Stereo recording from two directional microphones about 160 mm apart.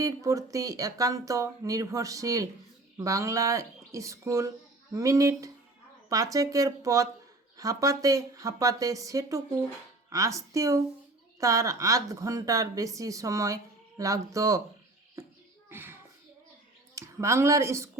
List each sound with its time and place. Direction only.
0.0 s a woman's voice: 20° right (ahead or behind)
15.7 s a sound: 15° right (ahead or behind)
16.9 s speech: 20° right (ahead or behind)